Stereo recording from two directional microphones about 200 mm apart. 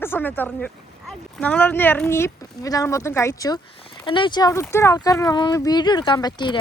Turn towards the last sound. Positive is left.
turn(degrees=20)  # may be behind; listen again after turning